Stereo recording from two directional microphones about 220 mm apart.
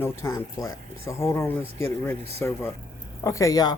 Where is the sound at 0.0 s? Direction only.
10° left (ahead or behind).